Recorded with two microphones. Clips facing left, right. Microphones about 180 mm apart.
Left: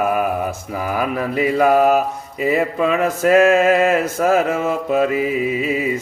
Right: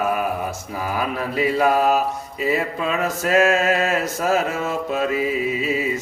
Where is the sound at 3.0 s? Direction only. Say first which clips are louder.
Left 5 dB; 55° left (ahead or behind).